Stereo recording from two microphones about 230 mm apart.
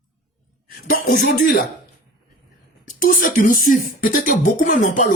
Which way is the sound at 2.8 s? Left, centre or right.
Left.